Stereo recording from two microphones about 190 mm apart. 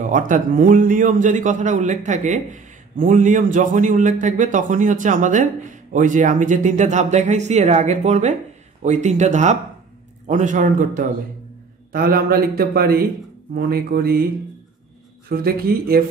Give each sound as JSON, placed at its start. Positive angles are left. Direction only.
{"t": 0.0, "sound": "a man's voice", "side_deg": -45}
{"t": 15.2, "sound": "a man's voice", "side_deg": -50}